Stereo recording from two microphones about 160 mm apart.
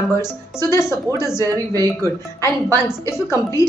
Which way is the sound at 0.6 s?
15° left (ahead or behind).